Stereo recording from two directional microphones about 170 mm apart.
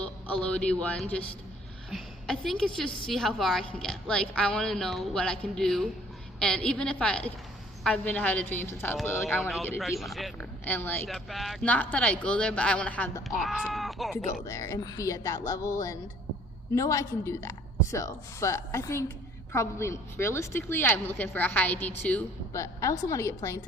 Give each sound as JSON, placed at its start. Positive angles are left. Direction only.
{"t": 0.0, "sound": "a man's voice", "side_deg": 5}
{"t": 10.0, "sound": "a woman's voice", "side_deg": 0}
{"t": 10.7, "sound": "a woman's voice", "side_deg": 10}
{"t": 11.1, "sound": "a woman's voice", "side_deg": 0}
{"t": 14.4, "sound": "a woman's voice", "side_deg": 20}